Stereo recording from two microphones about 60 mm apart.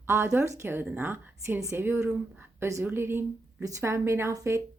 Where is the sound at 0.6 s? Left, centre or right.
Right.